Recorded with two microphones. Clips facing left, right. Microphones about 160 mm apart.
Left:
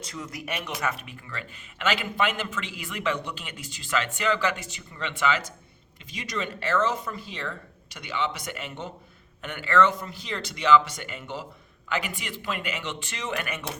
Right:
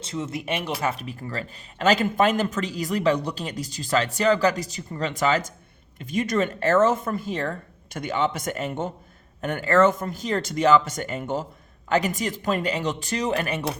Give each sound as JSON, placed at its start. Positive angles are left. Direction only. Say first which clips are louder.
{"t": 0.0, "sound": "speech", "louder": "right 7 dB", "side_deg": -25}
{"t": 6.0, "sound": "speech", "louder": "right 10 dB", "side_deg": -50}